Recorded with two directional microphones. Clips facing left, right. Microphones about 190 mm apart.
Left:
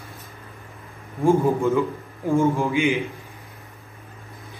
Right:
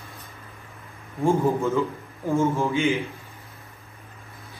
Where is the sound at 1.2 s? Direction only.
15° left (ahead or behind).